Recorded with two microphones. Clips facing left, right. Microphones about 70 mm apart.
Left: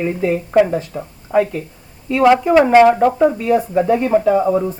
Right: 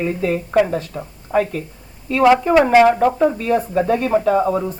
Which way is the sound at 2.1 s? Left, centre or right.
Centre.